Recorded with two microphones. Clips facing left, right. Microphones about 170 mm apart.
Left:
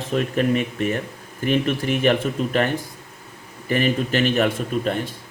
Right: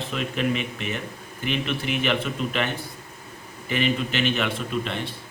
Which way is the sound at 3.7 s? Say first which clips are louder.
Left 4 dB; 45° left (ahead or behind).